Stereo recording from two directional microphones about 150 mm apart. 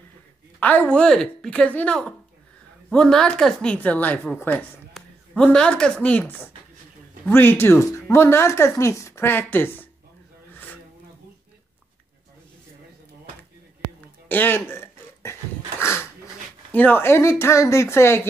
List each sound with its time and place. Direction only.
0.6 s speech: 10° left (ahead or behind)
14.3 s throat clearing: 15° left (ahead or behind)
16.7 s speech: 15° left (ahead or behind)